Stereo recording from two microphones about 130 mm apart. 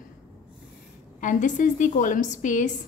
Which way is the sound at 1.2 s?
75° left (ahead or behind).